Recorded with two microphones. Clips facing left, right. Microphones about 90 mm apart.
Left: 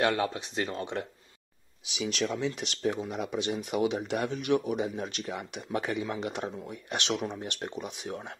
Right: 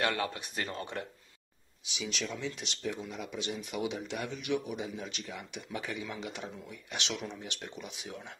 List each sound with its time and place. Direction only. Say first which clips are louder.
0.0 s speech: left 5 dB; 30° left (ahead or behind)
1.9 s speech: left 7 dB; 65° left (ahead or behind); by 8.4 s 45° left (ahead or behind)